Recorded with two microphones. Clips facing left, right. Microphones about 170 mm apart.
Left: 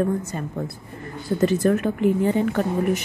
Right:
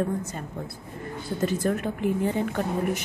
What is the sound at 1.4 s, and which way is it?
A woman's voice, 75° left (ahead or behind).